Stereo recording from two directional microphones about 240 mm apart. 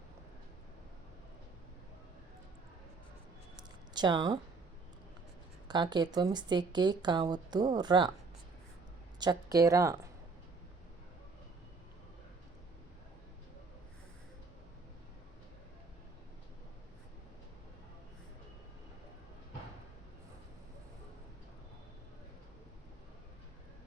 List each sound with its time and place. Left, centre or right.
3.6 s a sound: centre
5.6 s speech: centre
9.1 s a woman's voice: centre